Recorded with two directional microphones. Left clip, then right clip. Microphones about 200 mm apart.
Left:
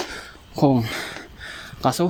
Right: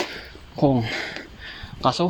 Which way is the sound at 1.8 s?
40° left (ahead or behind).